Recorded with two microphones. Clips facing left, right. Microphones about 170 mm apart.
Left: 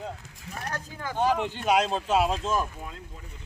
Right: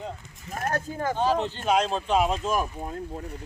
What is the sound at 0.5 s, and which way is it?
Speech, 50° right (ahead or behind).